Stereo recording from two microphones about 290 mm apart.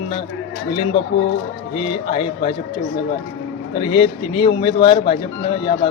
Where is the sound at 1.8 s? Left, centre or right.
Centre.